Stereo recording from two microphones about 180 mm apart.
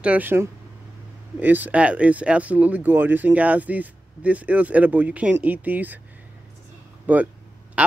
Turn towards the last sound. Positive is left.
turn(degrees=-5)  # may be behind; listen again after turning